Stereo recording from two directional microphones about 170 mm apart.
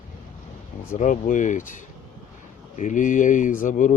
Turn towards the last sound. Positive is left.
turn(degrees=50)  # may be behind; listen again after turning